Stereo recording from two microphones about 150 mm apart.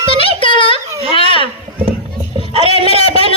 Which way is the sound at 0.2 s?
35° left (ahead or behind).